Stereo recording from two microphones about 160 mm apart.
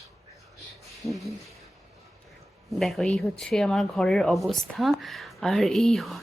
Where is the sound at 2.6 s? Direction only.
Centre (ahead or behind).